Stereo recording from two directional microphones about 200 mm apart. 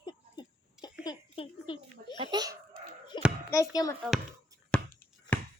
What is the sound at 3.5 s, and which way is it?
Speech, 15° left (ahead or behind).